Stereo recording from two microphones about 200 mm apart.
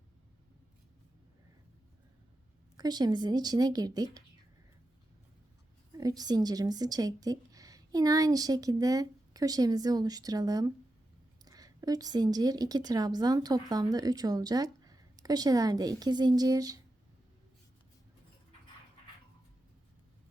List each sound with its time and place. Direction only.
2.7 s a woman's voice: 20° right (ahead or behind)
6.0 s a woman's voice: 20° right (ahead or behind)